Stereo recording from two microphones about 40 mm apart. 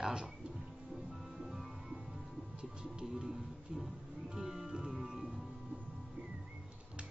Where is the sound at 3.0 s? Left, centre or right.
Centre.